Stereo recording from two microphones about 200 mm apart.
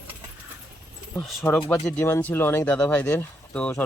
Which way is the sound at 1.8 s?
10° left (ahead or behind).